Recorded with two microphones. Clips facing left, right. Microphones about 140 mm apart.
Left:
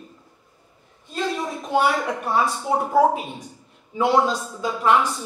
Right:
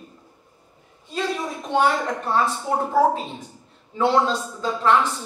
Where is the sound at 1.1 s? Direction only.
Centre (ahead or behind).